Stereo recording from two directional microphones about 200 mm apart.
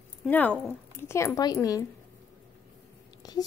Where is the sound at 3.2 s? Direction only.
20° left (ahead or behind).